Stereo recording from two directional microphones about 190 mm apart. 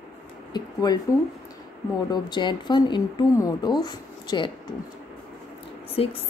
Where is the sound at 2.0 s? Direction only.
25° left (ahead or behind).